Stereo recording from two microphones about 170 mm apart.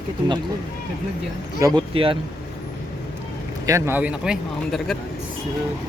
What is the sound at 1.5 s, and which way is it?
Speech, 20° right (ahead or behind).